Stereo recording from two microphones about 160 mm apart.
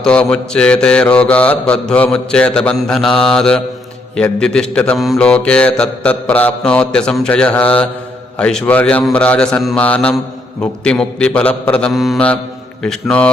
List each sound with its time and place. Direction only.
0.0 s mantra: 5° left (ahead or behind)